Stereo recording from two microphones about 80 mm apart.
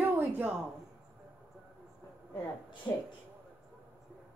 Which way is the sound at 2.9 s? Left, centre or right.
Left.